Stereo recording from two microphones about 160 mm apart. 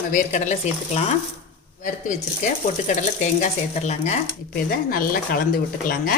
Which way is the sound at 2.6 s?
50° left (ahead or behind).